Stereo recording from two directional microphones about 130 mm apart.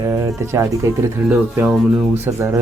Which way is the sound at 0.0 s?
20° right (ahead or behind).